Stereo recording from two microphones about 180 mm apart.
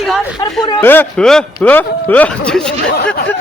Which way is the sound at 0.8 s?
10° left (ahead or behind).